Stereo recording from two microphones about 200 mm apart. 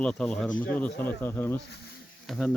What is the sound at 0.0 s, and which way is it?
Speech, 5° left (ahead or behind).